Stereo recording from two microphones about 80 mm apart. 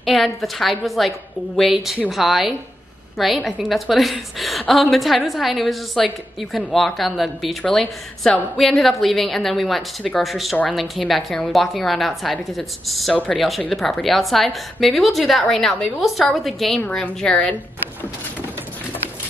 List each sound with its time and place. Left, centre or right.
0.0 s a woman's voice: centre
17.0 s speech: centre